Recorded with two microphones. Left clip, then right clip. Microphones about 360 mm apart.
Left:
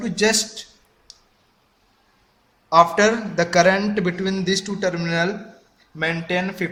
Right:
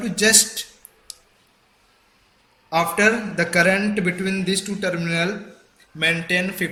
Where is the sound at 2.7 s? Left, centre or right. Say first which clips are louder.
Left 3 dB; left.